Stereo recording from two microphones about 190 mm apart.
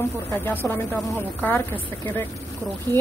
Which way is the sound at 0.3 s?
10° left (ahead or behind).